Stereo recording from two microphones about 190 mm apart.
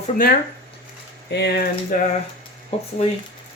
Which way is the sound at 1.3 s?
60° left (ahead or behind).